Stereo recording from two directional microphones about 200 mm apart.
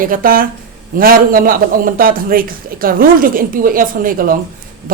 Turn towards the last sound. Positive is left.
turn(degrees=-45)  # may be behind; listen again after turning